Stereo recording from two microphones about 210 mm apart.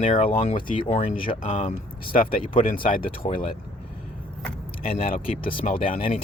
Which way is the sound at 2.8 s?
25° left (ahead or behind).